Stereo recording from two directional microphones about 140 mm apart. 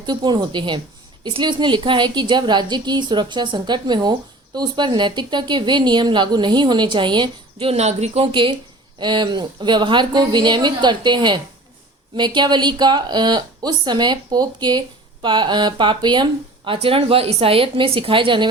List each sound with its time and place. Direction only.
0.0 s a woman's voice: 30° right (ahead or behind)
16.7 s a woman's voice: 45° right (ahead or behind)